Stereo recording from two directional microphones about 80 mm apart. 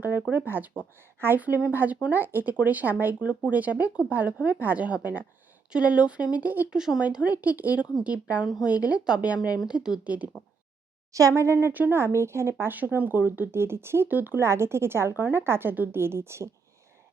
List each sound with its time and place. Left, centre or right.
0.0 s speech: right
6.7 s speech: centre
11.1 s speech: right